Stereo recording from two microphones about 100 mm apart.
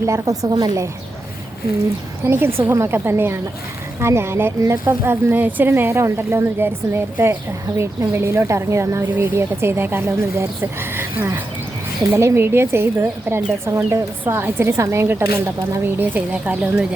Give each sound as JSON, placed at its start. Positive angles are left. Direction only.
{"t": 0.0, "sound": "speech", "side_deg": -30}
{"t": 0.5, "sound": "speech", "side_deg": -40}
{"t": 2.2, "sound": "speech", "side_deg": -25}
{"t": 16.0, "sound": "speech", "side_deg": -15}